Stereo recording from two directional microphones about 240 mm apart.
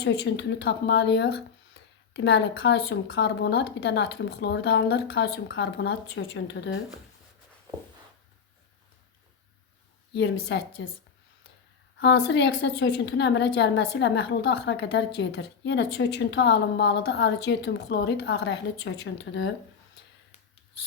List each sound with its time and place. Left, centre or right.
0.0 s a woman's voice: left
10.1 s a woman's voice: left
11.9 s a woman's voice: left